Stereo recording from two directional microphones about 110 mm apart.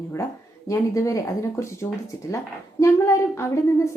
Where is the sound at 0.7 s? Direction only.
30° left (ahead or behind).